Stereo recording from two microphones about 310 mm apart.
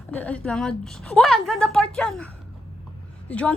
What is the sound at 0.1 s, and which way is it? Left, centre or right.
A woman's voice, centre.